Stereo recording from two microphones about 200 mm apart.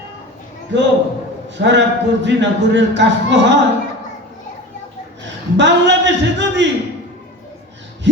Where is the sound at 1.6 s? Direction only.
60° right (ahead or behind).